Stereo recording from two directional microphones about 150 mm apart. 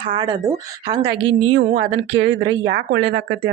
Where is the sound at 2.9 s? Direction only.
90° right.